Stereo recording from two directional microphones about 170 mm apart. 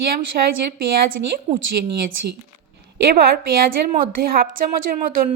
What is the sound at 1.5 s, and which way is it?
Speech, 30° right (ahead or behind).